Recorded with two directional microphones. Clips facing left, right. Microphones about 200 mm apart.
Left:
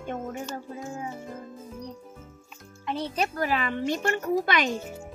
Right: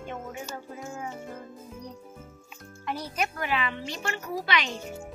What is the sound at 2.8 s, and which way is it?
Speech, 25° left (ahead or behind).